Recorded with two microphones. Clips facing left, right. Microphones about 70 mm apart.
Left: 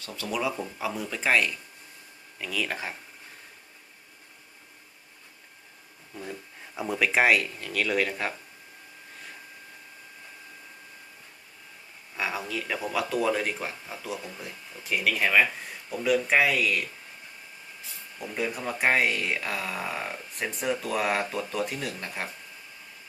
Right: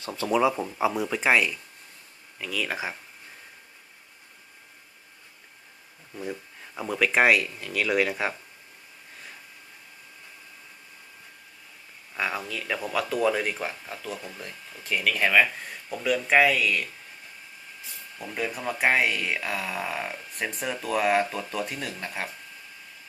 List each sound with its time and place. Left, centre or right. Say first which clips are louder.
0.0 s speech: right 7 dB; right
2.4 s speech: right 1 dB; centre
6.7 s speech: right 1 dB; centre
12.1 s speech: right 1 dB; centre
18.2 s speech: even; centre